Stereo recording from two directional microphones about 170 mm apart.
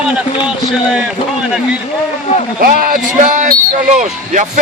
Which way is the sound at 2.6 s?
60° right (ahead or behind).